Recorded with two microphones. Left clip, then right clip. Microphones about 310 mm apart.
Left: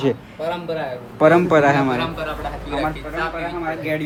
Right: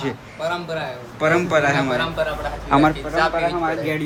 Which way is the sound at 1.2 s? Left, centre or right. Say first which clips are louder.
Left 4 dB; centre.